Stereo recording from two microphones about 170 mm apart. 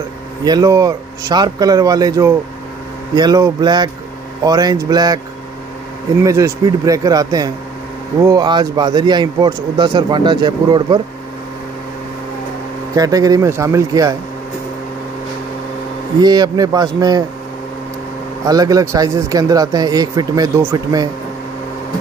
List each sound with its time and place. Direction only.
0.4 s a man's voice: 20° right (ahead or behind)
6.2 s a man's voice: 20° right (ahead or behind)
12.9 s a man's voice: 20° right (ahead or behind)
16.2 s a man's voice: 25° right (ahead or behind)
18.4 s a man's voice: 20° right (ahead or behind)